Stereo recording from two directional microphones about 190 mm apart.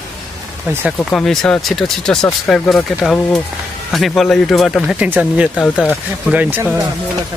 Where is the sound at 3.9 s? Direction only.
Centre (ahead or behind).